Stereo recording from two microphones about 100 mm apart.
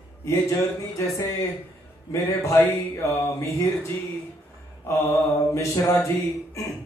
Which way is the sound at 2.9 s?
30° left (ahead or behind).